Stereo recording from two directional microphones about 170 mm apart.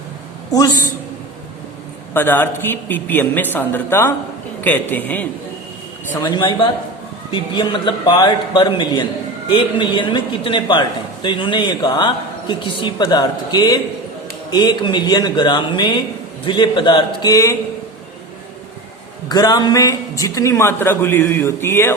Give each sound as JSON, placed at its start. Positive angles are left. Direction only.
{"t": 0.5, "sound": "a man's voice", "side_deg": 20}
{"t": 2.1, "sound": "a man's voice", "side_deg": 10}
{"t": 6.1, "sound": "a man's voice", "side_deg": 25}
{"t": 19.3, "sound": "a man's voice", "side_deg": 25}